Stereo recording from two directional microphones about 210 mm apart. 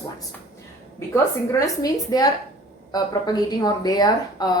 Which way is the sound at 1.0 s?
15° left (ahead or behind).